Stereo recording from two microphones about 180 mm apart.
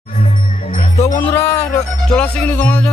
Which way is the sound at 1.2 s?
15° left (ahead or behind).